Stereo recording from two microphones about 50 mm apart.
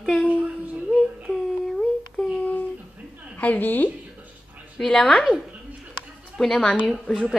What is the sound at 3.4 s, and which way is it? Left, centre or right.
Speech, left.